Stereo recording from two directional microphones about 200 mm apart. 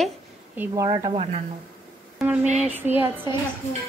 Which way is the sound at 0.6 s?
15° right (ahead or behind).